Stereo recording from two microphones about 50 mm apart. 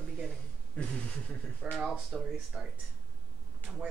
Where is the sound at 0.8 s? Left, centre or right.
Left.